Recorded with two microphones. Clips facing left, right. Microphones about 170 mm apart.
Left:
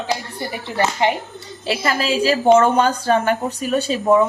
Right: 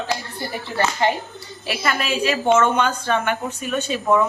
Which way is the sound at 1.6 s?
30° left (ahead or behind).